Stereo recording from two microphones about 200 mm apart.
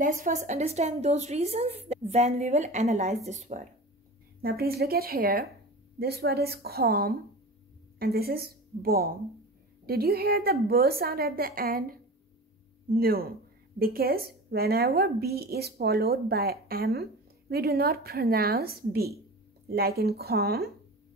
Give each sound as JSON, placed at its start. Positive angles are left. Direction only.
{"t": 0.0, "sound": "a woman's voice", "side_deg": -40}
{"t": 4.4, "sound": "speech", "side_deg": -50}